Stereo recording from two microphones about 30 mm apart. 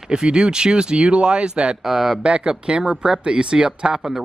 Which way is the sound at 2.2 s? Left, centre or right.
Right.